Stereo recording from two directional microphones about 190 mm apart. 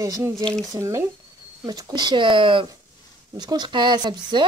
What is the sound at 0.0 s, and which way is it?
Speech, 20° right (ahead or behind).